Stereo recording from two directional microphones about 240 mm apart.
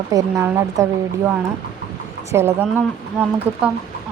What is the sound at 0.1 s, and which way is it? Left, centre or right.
Speech, centre.